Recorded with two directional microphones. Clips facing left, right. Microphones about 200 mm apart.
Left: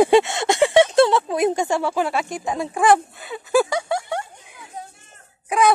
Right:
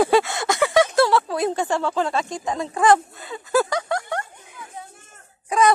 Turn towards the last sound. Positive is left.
turn(degrees=5)  # may be behind; listen again after turning